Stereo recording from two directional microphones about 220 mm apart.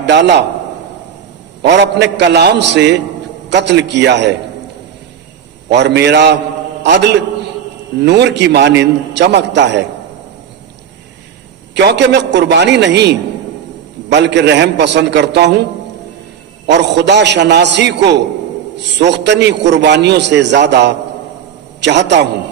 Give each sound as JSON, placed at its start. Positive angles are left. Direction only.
{"t": 0.0, "sound": "a man's voice", "side_deg": -50}
{"t": 1.6, "sound": "a man's voice", "side_deg": -50}
{"t": 5.7, "sound": "a man's voice", "side_deg": -50}
{"t": 11.7, "sound": "a man's voice", "side_deg": -50}
{"t": 16.6, "sound": "a man's voice", "side_deg": -50}